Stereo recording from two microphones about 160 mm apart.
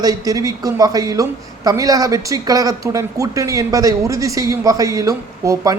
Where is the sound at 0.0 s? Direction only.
25° right (ahead or behind).